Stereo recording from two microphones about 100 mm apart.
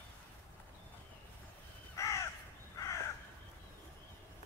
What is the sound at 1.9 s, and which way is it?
Crow, 30° left (ahead or behind).